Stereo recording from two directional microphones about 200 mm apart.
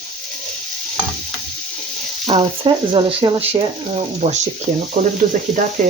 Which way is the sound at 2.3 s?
25° right (ahead or behind).